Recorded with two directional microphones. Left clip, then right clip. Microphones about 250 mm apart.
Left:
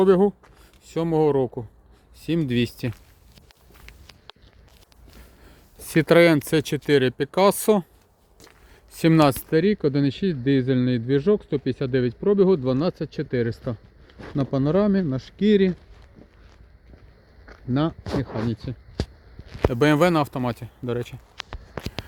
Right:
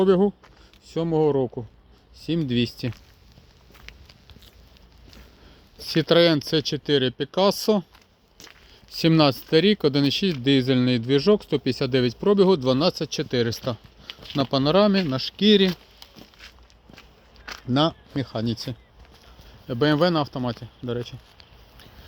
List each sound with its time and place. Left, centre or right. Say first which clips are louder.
0.0 s speech: left 2 dB; centre
6.0 s speech: left 2 dB; left
9.0 s speech: left 1 dB; centre
17.7 s speech: right 2 dB; centre
19.7 s speech: left 1 dB; centre